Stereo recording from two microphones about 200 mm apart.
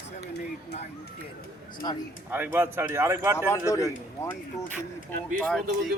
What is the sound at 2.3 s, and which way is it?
Speech, 10° right (ahead or behind).